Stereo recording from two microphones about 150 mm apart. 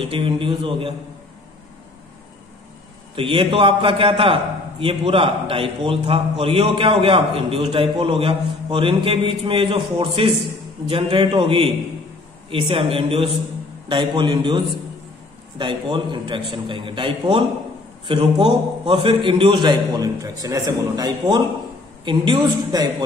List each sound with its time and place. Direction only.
0.0 s a man's voice: 35° right (ahead or behind)
3.2 s a man's voice: 35° right (ahead or behind)